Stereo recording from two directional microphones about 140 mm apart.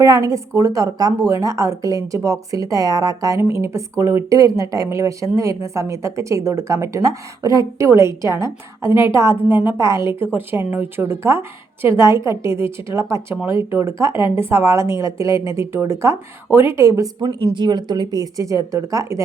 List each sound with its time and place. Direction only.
0.0 s a woman's voice: 25° right (ahead or behind)